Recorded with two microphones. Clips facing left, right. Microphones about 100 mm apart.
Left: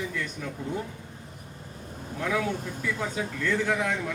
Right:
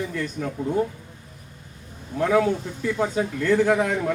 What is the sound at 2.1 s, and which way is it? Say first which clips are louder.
A man's voice: right 8 dB; 45° right (ahead or behind).